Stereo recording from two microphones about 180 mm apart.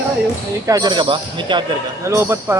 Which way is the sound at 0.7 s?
20° right (ahead or behind).